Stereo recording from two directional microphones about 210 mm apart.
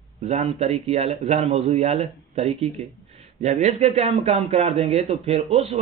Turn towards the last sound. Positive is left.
turn(degrees=-30)  # may be behind; listen again after turning